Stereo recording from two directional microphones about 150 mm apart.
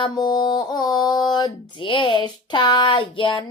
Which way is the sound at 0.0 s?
30° left (ahead or behind).